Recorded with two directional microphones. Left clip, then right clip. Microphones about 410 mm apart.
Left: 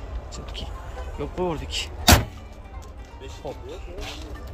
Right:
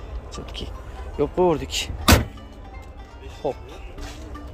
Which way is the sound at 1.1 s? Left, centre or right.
Centre.